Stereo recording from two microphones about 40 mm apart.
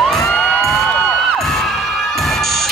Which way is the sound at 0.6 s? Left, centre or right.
Centre.